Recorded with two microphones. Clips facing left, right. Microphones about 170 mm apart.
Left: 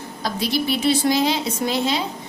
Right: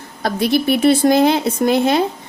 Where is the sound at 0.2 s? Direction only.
55° right (ahead or behind).